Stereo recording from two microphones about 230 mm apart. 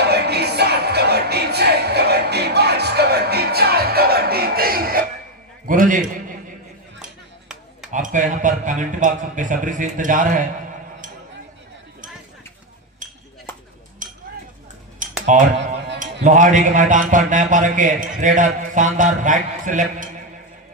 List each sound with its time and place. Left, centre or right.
0.0 s music: right
5.6 s a man's voice: right
7.9 s a man's voice: right
14.0 s a sound: right
15.3 s a man's voice: right